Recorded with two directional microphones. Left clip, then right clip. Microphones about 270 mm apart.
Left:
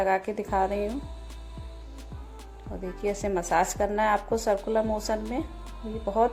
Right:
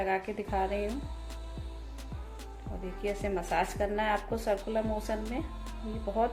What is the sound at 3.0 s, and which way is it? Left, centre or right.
A woman's voice, centre.